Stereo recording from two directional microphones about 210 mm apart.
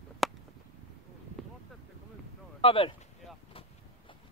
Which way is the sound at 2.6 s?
25° left (ahead or behind).